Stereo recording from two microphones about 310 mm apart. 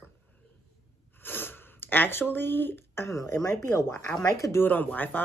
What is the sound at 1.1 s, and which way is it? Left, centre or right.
Speech, centre.